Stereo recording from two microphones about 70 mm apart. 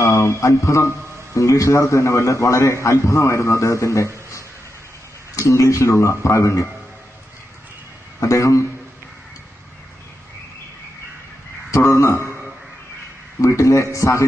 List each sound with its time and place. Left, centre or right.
0.0 s a man's voice: left
5.5 s a man's voice: left
8.2 s a man's voice: left
11.7 s a man's voice: left
13.4 s a man's voice: left